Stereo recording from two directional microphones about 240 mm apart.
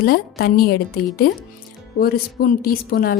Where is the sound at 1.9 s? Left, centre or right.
Left.